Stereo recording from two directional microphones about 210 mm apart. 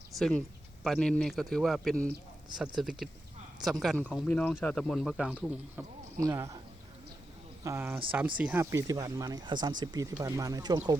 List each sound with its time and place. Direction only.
0.2 s speech: centre (ahead or behind); by 6.6 s 15° right (ahead or behind)
7.6 s speech: 10° right (ahead or behind)